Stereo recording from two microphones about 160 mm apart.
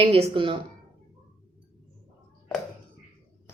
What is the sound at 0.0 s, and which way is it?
Speech, 35° right (ahead or behind).